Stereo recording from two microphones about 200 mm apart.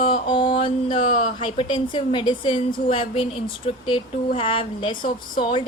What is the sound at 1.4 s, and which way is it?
A woman's voice, 25° left (ahead or behind).